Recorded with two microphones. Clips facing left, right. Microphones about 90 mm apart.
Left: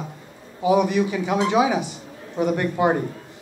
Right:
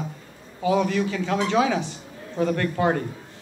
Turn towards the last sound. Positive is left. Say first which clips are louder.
# left 2 dB
turn(degrees=15)  # may be behind; listen again after turning